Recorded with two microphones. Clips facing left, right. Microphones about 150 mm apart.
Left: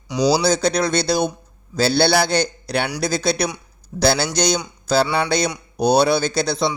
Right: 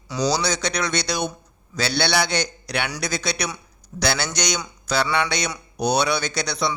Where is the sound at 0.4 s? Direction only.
30° left (ahead or behind).